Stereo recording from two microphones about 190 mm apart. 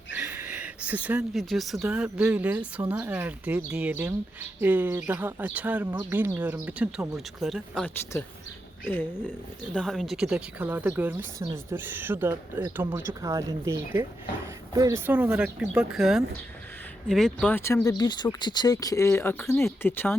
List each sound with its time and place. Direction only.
0.2 s speech: 10° right (ahead or behind)
8.8 s speech: 10° left (ahead or behind)